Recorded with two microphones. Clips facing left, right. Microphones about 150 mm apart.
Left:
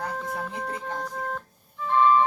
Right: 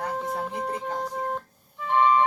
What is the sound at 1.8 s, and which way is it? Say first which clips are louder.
Music: left 1 dB; 20° right (ahead or behind).